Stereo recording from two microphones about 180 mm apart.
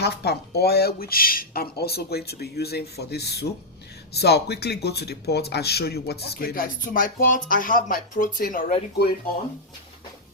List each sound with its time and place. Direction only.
0.0 s speech: 65° left (ahead or behind)